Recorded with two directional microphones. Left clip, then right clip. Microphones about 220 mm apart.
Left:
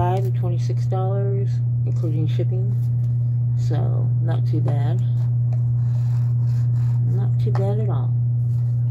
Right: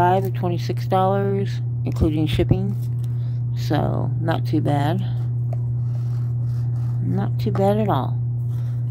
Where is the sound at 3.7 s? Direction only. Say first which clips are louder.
Right 8 dB; 35° right (ahead or behind).